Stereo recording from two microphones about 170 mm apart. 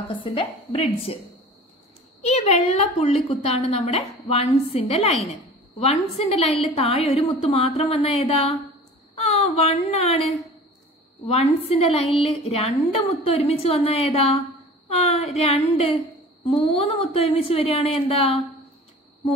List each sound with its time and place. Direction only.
0.1 s a woman's voice: 30° left (ahead or behind)
2.2 s a woman's voice: 40° left (ahead or behind)